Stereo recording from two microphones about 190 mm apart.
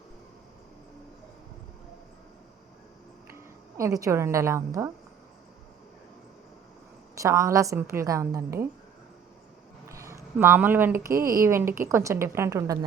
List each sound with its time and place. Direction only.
3.8 s a woman's voice: 15° right (ahead or behind)
7.2 s a woman's voice: 15° right (ahead or behind)
9.9 s a woman's voice: 15° right (ahead or behind)